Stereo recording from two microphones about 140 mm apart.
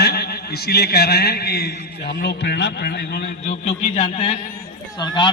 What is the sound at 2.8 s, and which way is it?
Speech, 90° left.